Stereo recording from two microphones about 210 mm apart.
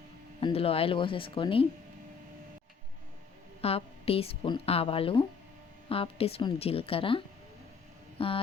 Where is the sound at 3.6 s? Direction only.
30° left (ahead or behind).